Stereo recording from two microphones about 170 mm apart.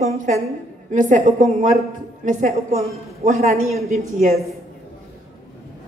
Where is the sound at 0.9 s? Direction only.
50° right (ahead or behind).